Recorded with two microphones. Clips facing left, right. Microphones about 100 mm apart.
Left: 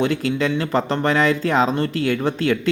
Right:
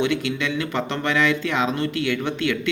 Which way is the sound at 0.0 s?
40° left (ahead or behind).